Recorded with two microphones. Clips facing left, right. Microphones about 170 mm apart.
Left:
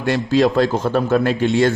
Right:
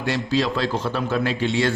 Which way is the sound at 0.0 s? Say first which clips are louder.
Left 6 dB; 50° left (ahead or behind).